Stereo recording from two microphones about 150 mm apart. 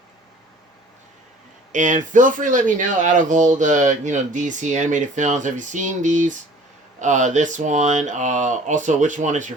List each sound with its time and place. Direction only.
1.7 s speech: 55° right (ahead or behind)